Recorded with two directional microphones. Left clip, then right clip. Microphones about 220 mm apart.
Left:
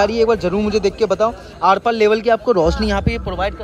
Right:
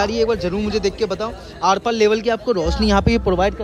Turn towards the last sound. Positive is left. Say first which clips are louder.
# right 4 dB
turn(degrees=-35)  # may be behind; listen again after turning